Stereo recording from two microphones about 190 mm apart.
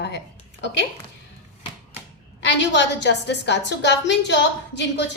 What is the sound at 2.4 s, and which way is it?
A woman's voice, 65° left (ahead or behind).